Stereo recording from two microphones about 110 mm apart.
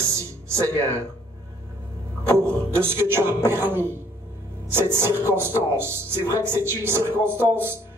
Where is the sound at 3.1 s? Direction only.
20° right (ahead or behind).